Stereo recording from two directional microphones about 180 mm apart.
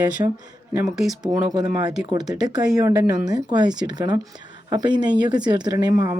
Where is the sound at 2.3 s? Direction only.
20° right (ahead or behind).